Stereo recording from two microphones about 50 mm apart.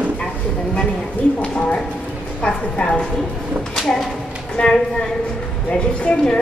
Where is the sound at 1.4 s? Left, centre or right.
Left.